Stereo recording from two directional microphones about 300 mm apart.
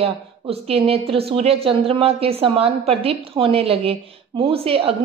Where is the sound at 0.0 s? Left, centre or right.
Centre.